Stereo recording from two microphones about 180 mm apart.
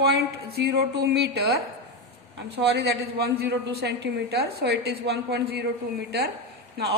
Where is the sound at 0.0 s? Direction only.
65° right (ahead or behind).